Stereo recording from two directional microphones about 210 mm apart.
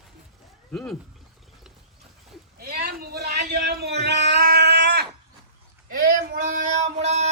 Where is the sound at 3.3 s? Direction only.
50° right (ahead or behind).